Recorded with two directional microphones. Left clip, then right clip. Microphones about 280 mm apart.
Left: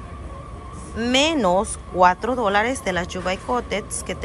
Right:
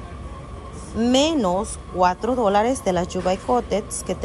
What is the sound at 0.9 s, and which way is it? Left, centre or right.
A woman's voice, centre.